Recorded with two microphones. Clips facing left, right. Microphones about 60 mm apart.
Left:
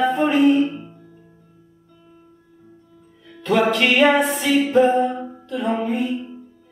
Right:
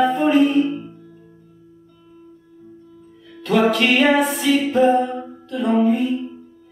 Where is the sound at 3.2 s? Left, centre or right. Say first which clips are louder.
Right 1 dB; centre.